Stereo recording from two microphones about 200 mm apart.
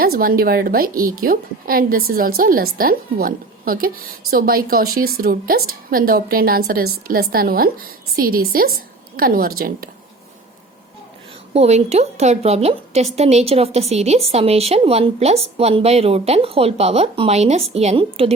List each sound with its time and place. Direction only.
0.0 s a woman's voice: 45° right (ahead or behind)
11.5 s a woman's voice: 35° right (ahead or behind)